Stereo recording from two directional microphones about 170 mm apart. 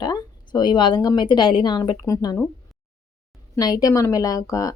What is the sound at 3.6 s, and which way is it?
A woman's voice, 20° left (ahead or behind).